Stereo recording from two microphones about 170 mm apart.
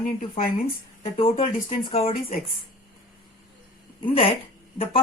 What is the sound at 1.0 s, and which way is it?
Speech, 30° left (ahead or behind).